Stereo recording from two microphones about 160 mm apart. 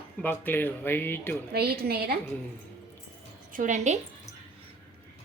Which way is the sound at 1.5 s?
75° right (ahead or behind).